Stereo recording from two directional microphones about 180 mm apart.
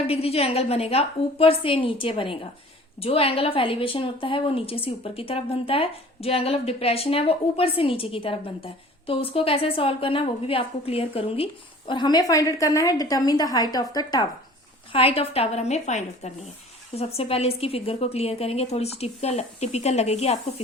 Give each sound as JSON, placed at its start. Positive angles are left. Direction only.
{"t": 0.1, "sound": "a woman's voice", "side_deg": 35}
{"t": 14.9, "sound": "a woman's voice", "side_deg": 30}